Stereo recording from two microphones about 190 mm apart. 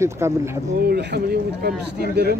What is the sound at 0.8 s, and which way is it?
Speech, 60° right (ahead or behind).